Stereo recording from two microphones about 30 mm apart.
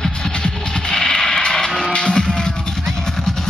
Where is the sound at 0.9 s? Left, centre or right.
Centre.